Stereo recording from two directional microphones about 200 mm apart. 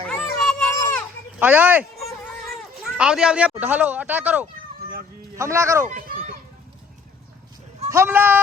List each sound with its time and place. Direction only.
0.1 s a sound: 5° left (ahead or behind)
1.4 s speech: 10° right (ahead or behind)
5.9 s children playing: 45° right (ahead or behind)
7.9 s speech: 10° right (ahead or behind)